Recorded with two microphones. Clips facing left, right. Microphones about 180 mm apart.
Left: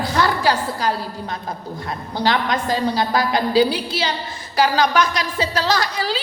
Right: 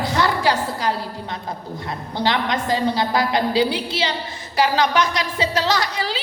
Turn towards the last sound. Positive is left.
turn(degrees=-20)  # may be behind; listen again after turning